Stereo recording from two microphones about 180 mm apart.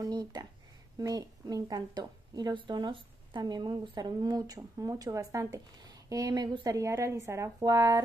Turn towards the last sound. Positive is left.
turn(degrees=-20)  # may be behind; listen again after turning